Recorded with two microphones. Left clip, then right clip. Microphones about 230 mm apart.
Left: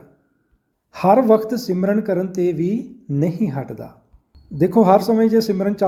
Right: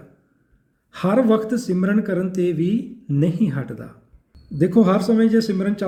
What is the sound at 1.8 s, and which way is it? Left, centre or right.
Speech, centre.